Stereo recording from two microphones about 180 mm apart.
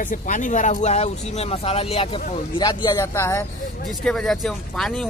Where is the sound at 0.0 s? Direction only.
45° left (ahead or behind); by 3.0 s 25° left (ahead or behind).